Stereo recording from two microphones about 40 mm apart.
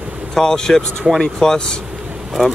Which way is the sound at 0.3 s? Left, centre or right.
Centre.